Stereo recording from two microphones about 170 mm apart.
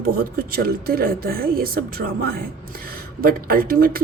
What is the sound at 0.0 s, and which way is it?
Speech, 60° right (ahead or behind).